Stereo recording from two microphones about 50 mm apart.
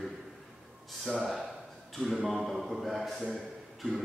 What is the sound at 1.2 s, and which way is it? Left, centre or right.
A man's voice, centre.